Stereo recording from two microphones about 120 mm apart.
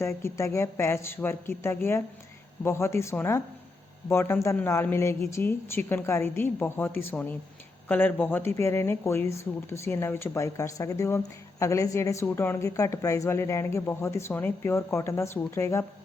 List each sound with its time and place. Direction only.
0.0 s speech: 20° left (ahead or behind)